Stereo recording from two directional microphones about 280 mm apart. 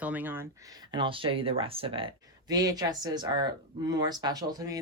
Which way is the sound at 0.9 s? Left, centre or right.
Centre.